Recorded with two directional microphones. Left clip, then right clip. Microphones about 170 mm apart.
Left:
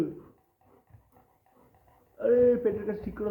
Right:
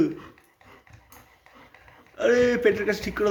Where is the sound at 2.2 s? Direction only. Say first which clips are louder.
Right 2 dB; 20° right (ahead or behind).